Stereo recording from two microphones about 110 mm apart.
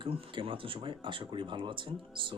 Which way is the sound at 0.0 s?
50° right (ahead or behind).